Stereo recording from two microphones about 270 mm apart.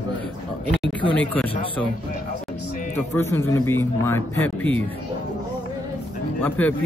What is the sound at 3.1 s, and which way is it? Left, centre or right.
Speech, centre.